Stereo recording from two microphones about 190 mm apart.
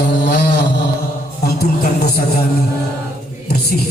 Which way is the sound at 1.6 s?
55° left (ahead or behind).